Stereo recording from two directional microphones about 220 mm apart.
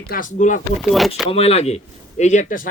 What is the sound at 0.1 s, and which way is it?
Speech, 35° left (ahead or behind).